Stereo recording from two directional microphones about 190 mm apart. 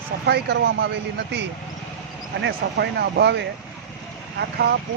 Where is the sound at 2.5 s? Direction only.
60° right (ahead or behind).